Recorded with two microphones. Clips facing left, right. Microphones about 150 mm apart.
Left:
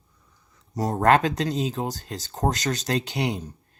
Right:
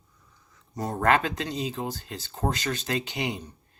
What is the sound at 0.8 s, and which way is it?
Speech, 40° left (ahead or behind).